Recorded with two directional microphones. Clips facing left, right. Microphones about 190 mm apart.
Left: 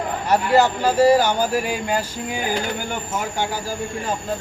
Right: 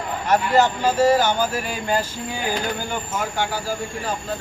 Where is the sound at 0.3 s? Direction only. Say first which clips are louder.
Left 1 dB; 10° left (ahead or behind).